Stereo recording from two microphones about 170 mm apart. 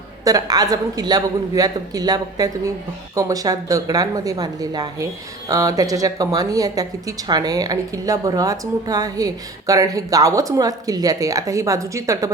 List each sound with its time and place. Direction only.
0.3 s speech: 20° right (ahead or behind)